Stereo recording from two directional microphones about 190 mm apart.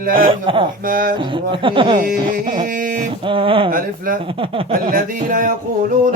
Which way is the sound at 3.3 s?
25° right (ahead or behind).